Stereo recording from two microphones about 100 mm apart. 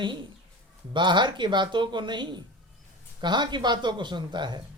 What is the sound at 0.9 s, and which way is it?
A man's voice, 50° right (ahead or behind).